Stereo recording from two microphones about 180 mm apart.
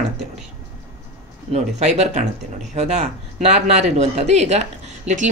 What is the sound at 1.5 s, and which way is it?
Speech, 40° right (ahead or behind).